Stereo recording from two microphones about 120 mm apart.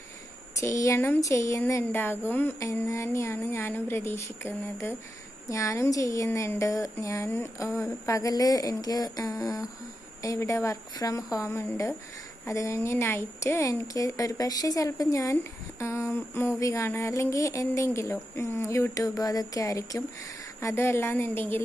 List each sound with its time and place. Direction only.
0.6 s speech: 25° left (ahead or behind)